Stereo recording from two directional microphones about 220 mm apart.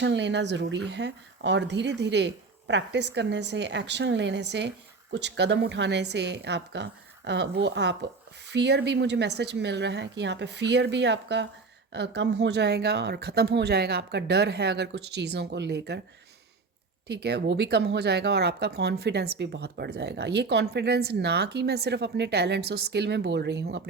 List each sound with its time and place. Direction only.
0.0 s speech: 50° right (ahead or behind)
17.1 s speech: 50° right (ahead or behind)